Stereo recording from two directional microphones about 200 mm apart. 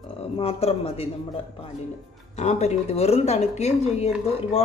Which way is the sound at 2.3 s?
35° left (ahead or behind).